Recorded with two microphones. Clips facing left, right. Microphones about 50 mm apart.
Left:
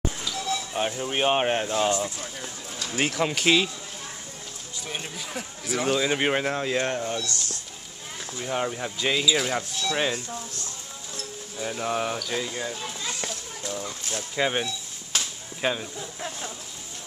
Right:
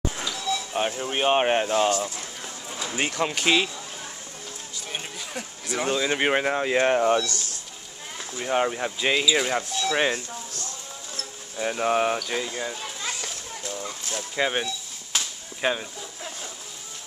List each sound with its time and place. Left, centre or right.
0.7 s speech: centre
1.4 s speech: centre
1.9 s speech: left
3.0 s speech: centre
4.8 s speech: centre
7.0 s speech: right
7.2 s speech: left
8.4 s speech: right
11.5 s speech: right
12.2 s speech: centre
15.1 s a sound: centre
16.2 s speech: centre